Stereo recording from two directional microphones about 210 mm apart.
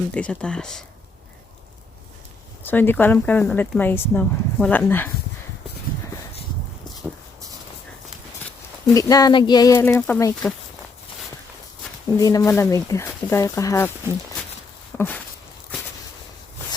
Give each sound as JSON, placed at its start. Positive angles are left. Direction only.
{"t": 0.1, "sound": "speech", "side_deg": 5}
{"t": 2.6, "sound": "speech", "side_deg": 10}
{"t": 7.1, "sound": "a sound", "side_deg": 0}
{"t": 8.9, "sound": "speech", "side_deg": 15}
{"t": 12.1, "sound": "speech", "side_deg": 15}
{"t": 14.9, "sound": "a sound", "side_deg": 10}